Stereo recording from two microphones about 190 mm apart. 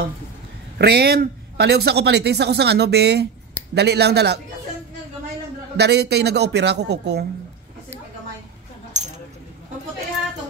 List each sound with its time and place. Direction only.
0.7 s a man's voice: 55° right (ahead or behind)
5.8 s a man's voice: 60° right (ahead or behind)
9.0 s keys jangling: 40° right (ahead or behind)